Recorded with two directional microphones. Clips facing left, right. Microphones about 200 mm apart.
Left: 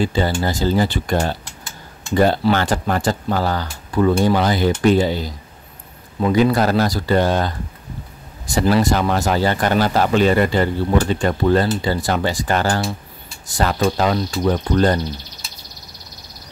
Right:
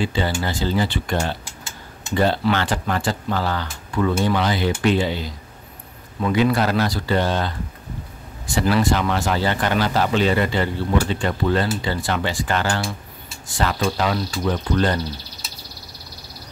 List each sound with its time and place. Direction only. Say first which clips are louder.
0.0 s speech: left 4 dB; 40° left (ahead or behind)